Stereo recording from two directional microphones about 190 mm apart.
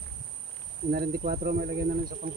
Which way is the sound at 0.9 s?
55° right (ahead or behind).